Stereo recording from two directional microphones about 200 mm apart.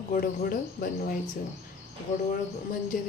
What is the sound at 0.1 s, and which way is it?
Speech, 45° left (ahead or behind).